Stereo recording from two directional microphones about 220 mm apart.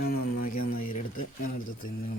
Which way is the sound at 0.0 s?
40° left (ahead or behind).